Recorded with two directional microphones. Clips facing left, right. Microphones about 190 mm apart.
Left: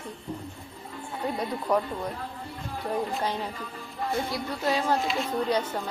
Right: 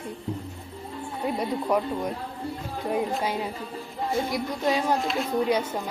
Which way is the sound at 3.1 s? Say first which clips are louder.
Right 2 dB; 10° right (ahead or behind).